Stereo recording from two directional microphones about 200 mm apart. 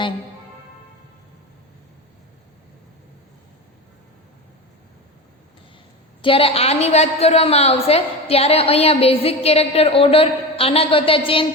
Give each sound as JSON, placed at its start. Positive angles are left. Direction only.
{"t": 6.2, "sound": "a woman's voice", "side_deg": 25}